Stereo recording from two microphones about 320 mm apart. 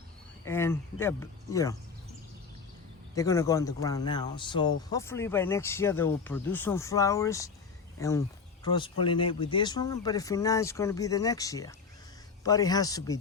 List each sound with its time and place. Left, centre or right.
0.4 s speech: centre
3.2 s speech: centre